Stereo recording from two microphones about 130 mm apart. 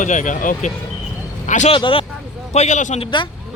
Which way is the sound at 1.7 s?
45° left (ahead or behind).